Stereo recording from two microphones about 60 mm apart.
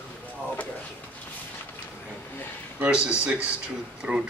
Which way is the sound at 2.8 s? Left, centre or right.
Centre.